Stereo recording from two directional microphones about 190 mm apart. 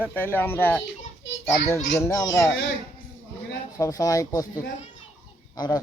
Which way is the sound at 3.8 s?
20° left (ahead or behind).